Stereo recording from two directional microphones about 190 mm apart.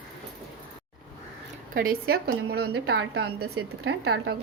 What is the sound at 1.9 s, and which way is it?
A woman's voice, 55° right (ahead or behind).